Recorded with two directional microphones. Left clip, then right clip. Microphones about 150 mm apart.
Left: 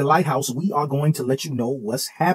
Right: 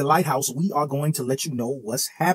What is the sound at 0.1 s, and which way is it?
Speech, 5° right (ahead or behind).